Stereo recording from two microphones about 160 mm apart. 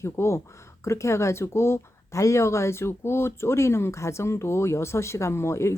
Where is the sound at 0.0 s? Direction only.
15° left (ahead or behind).